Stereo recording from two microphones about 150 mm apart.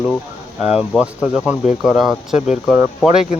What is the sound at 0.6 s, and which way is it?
Speech, 5° right (ahead or behind).